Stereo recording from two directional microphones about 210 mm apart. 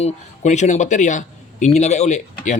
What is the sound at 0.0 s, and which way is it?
A man's voice, 35° left (ahead or behind).